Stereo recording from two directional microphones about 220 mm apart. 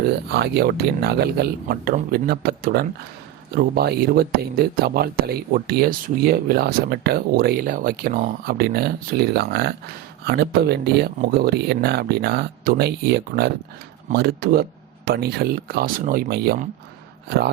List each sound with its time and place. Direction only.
0.3 s speech: 45° right (ahead or behind)